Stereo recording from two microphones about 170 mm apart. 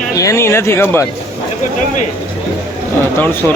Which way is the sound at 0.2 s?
15° left (ahead or behind).